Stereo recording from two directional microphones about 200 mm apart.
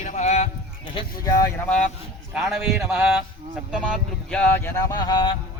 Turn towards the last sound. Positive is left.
turn(degrees=20)  # may be behind; listen again after turning